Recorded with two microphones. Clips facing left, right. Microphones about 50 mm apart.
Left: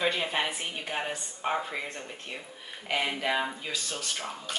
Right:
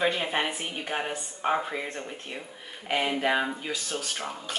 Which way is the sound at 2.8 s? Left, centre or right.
Centre.